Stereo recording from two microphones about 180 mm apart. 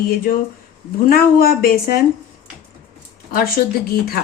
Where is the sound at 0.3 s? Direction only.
50° left (ahead or behind).